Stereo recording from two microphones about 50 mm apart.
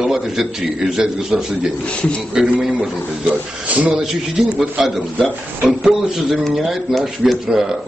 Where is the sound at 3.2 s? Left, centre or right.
Right.